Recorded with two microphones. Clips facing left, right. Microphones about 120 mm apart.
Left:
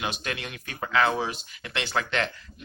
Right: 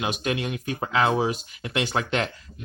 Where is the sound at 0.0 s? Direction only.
15° right (ahead or behind).